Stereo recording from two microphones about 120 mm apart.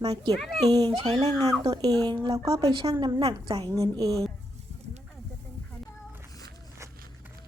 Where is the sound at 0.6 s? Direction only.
35° right (ahead or behind).